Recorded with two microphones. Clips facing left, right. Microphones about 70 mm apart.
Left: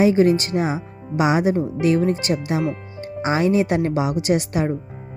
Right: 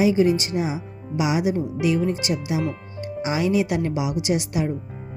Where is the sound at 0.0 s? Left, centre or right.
Left.